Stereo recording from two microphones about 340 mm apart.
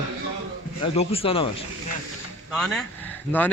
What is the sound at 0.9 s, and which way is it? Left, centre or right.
Speech, centre.